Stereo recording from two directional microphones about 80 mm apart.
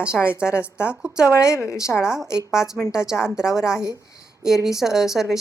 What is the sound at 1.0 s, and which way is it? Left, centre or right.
Speech, centre.